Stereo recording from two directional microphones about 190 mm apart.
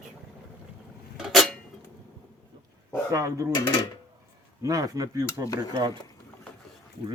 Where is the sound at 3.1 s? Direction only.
15° right (ahead or behind).